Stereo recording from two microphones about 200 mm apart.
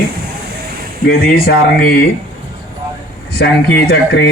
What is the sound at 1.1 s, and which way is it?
Speech, 50° left (ahead or behind).